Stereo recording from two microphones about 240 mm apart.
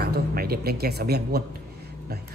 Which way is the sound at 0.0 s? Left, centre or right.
Right.